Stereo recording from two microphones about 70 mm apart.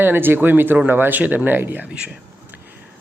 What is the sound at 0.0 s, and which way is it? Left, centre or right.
Speech, right.